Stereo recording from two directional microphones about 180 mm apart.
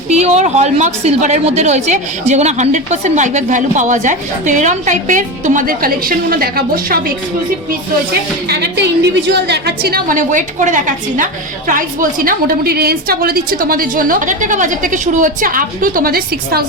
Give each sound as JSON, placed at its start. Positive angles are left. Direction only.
{"t": 0.1, "sound": "a woman's voice", "side_deg": -40}
{"t": 8.4, "sound": "a woman's voice", "side_deg": -70}